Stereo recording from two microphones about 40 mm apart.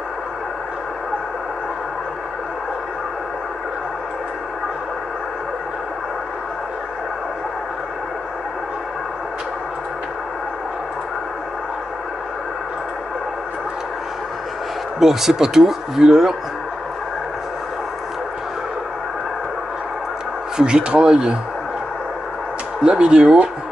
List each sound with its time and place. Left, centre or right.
15.0 s speech: centre
20.5 s speech: right
22.8 s speech: right